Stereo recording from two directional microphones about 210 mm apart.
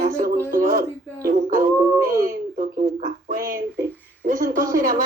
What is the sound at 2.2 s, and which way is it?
A child's voice, 35° right (ahead or behind).